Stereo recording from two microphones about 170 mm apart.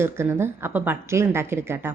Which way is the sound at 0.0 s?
15° right (ahead or behind).